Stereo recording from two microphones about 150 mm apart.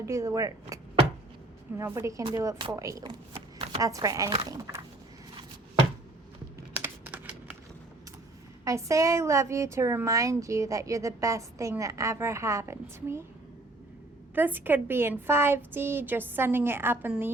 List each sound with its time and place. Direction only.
0.0 s a woman's voice: 20° right (ahead or behind)
1.8 s a woman's voice: 20° right (ahead or behind)
3.3 s shuffling cards: 40° right (ahead or behind)
3.8 s a woman's voice: 25° right (ahead or behind)
6.7 s computer keyboard: 10° right (ahead or behind)
8.6 s a woman's voice: 20° right (ahead or behind)
14.3 s a woman's voice: 10° right (ahead or behind)